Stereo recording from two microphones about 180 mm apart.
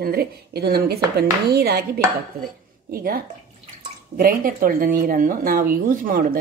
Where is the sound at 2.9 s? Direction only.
55° right (ahead or behind).